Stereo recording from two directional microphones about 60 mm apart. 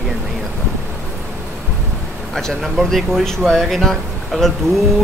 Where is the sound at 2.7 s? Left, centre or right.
Centre.